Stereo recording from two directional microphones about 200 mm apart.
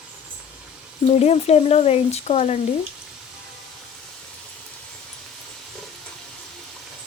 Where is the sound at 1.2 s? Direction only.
30° left (ahead or behind).